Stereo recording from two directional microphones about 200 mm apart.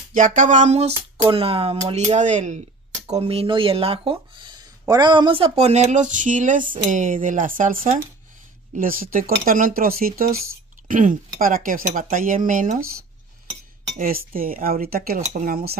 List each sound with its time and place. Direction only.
0.1 s speech: 40° right (ahead or behind)
13.9 s speech: 45° right (ahead or behind)